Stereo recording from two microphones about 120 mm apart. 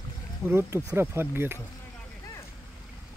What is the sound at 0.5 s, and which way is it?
Speech, 20° right (ahead or behind).